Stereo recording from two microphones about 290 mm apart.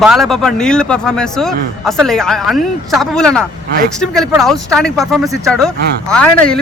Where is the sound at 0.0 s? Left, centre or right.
Centre.